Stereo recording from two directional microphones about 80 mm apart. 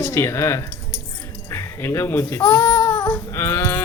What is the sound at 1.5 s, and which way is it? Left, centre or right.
Speech, left.